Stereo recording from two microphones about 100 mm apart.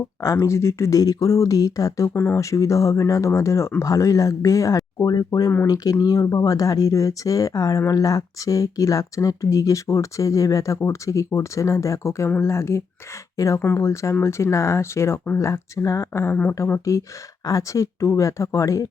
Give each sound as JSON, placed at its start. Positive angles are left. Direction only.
{"t": 0.3, "sound": "speech", "side_deg": 30}
{"t": 16.3, "sound": "speech", "side_deg": 15}
{"t": 16.6, "sound": "speech", "side_deg": 25}